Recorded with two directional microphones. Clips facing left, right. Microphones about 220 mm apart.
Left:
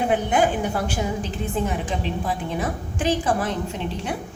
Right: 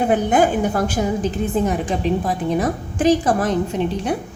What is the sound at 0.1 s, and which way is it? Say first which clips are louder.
A woman's voice: right 4 dB; 45° right (ahead or behind).